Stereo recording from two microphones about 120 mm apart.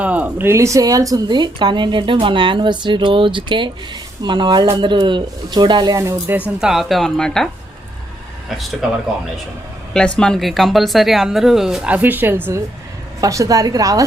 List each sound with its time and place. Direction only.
0.0 s speech: 10° right (ahead or behind)
6.6 s speech: 5° right (ahead or behind)
9.9 s speech: 5° left (ahead or behind); by 12.5 s 15° right (ahead or behind)
13.2 s a woman's voice: 30° right (ahead or behind)